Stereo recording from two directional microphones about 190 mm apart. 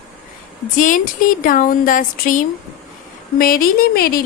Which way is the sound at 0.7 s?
45° left (ahead or behind).